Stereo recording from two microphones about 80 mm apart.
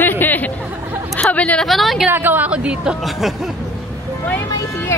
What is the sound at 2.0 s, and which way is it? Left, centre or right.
Speech, right.